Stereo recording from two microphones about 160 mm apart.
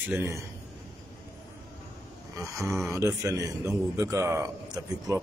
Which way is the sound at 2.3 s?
20° right (ahead or behind).